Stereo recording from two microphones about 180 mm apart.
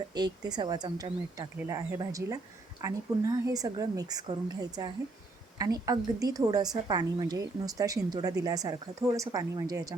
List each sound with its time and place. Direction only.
0.1 s a woman's voice: 25° right (ahead or behind)